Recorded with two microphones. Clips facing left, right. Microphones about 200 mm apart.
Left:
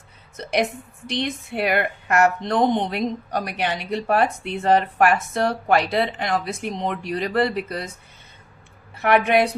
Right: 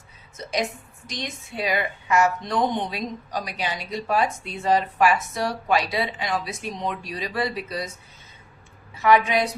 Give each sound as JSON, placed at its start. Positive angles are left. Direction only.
{"t": 0.3, "sound": "speech", "side_deg": 60}
{"t": 9.0, "sound": "speech", "side_deg": 60}